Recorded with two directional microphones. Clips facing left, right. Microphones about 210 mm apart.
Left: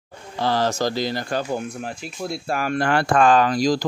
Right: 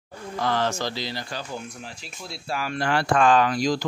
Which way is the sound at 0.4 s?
35° left (ahead or behind).